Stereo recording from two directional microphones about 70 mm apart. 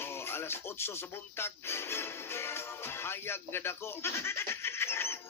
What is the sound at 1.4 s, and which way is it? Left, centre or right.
Music, left.